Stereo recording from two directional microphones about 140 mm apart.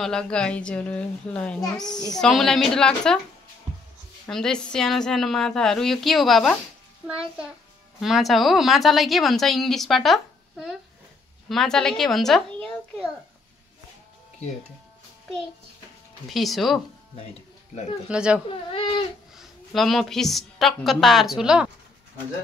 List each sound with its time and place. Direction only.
0.0 s a woman's voice: 5° left (ahead or behind)
4.3 s a woman's voice: 5° left (ahead or behind)
8.0 s a woman's voice: centre (ahead or behind)
16.3 s a woman's voice: centre (ahead or behind)
18.0 s a woman's voice: 5° right (ahead or behind)
18.5 s speech: 40° left (ahead or behind)
19.3 s a woman's voice: centre (ahead or behind)